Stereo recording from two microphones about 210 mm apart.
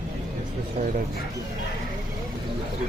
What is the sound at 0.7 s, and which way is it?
Speech, 40° right (ahead or behind).